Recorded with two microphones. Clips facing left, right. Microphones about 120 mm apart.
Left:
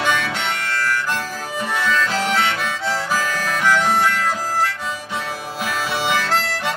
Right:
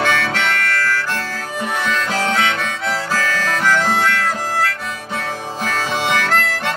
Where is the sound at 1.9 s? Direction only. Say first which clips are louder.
Left 1 dB; centre (ahead or behind).